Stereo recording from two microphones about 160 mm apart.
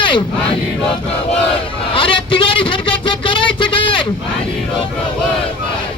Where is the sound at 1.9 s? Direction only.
35° left (ahead or behind).